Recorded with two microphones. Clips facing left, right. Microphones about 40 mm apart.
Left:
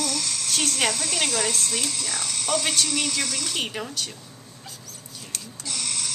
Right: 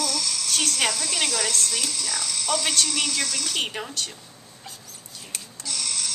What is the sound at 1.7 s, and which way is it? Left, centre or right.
Speech, left.